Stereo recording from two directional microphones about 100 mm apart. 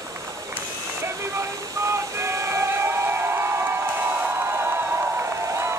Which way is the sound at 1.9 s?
30° right (ahead or behind).